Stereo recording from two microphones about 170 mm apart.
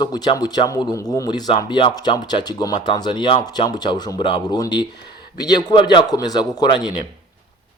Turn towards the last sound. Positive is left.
turn(degrees=25)  # may be behind; listen again after turning